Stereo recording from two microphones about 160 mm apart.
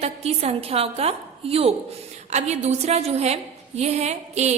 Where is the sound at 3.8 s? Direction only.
45° right (ahead or behind).